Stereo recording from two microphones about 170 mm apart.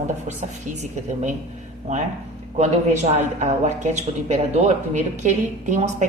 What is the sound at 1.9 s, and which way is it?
A woman's voice, 40° right (ahead or behind).